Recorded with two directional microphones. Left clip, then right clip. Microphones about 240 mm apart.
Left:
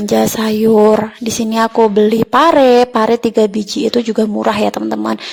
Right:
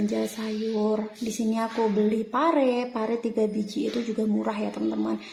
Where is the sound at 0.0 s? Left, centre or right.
Left.